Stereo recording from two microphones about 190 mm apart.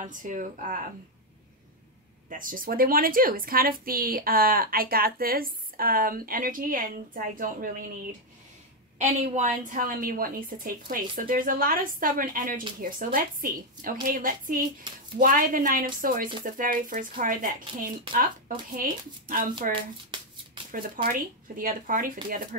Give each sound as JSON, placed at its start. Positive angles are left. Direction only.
{"t": 0.0, "sound": "a woman's voice", "side_deg": -40}
{"t": 2.2, "sound": "a woman's voice", "side_deg": -45}
{"t": 8.9, "sound": "a woman's voice", "side_deg": -40}
{"t": 19.7, "sound": "shuffling cards", "side_deg": -25}
{"t": 20.7, "sound": "a woman's voice", "side_deg": -45}